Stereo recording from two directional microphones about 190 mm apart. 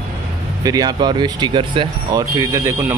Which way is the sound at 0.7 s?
20° right (ahead or behind).